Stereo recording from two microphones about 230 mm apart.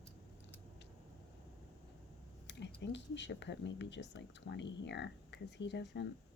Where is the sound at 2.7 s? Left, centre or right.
Left.